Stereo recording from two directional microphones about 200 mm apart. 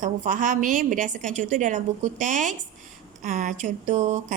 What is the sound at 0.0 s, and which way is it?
Speech, 40° right (ahead or behind).